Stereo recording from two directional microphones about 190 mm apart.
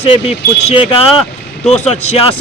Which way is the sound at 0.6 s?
30° left (ahead or behind).